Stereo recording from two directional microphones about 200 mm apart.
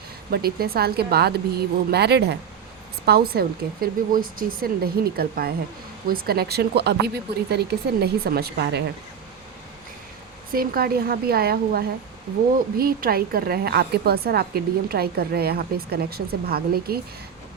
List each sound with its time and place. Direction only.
0.3 s a woman's voice: 50° right (ahead or behind)
10.5 s a woman's voice: 50° right (ahead or behind)